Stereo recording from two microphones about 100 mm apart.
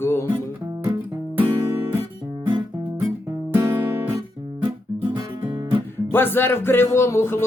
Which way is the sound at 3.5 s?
30° right (ahead or behind).